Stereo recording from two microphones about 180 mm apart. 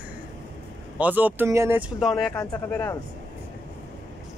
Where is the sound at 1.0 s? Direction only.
10° right (ahead or behind).